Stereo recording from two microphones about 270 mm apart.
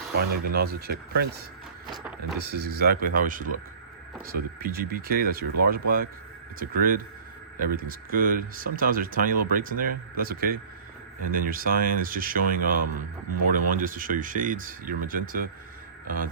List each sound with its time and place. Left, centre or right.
0.2 s speech: right
2.4 s speech: right